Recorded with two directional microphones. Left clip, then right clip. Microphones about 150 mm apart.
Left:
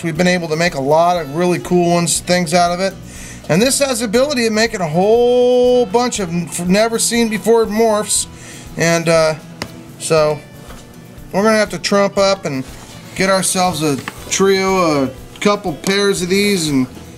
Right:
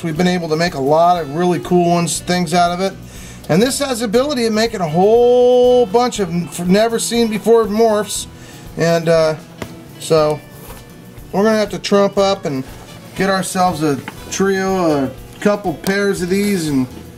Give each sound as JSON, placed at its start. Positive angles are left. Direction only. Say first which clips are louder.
{"t": 0.2, "sound": "speech", "louder": "left 2 dB", "side_deg": 5}
{"t": 5.1, "sound": "a sound", "louder": "right 1 dB", "side_deg": 30}
{"t": 5.9, "sound": "speech", "louder": "right 1 dB", "side_deg": 5}
{"t": 11.5, "sound": "speech", "louder": "left 1 dB", "side_deg": 10}